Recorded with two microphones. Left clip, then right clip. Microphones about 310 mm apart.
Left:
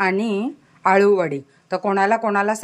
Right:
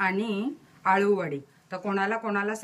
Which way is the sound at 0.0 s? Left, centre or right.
Centre.